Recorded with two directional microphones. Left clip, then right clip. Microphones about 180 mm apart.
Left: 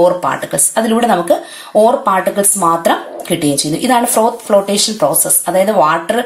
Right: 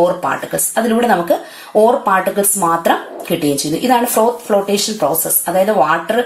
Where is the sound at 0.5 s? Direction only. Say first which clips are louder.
Left 2 dB; 25° left (ahead or behind).